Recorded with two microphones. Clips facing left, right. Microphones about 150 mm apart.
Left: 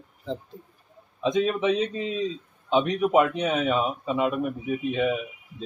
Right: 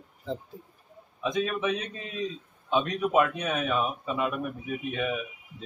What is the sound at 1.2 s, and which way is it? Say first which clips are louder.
A man's voice: left 5 dB; 20° left (ahead or behind).